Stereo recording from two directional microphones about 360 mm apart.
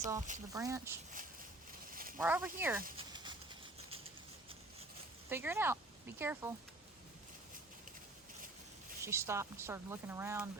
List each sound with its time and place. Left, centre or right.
0.0 s speech: centre
0.5 s speech: centre
1.9 s a sound: right
2.1 s speech: centre
3.1 s a sound: centre
5.3 s speech: centre
9.0 s speech: centre